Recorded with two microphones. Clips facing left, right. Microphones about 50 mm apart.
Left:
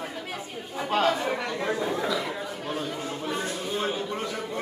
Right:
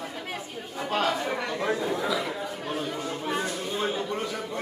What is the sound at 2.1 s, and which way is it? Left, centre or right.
Chatter, centre.